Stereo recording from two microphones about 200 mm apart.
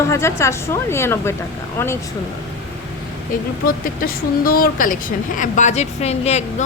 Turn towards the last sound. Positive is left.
turn(degrees=35)  # may be behind; listen again after turning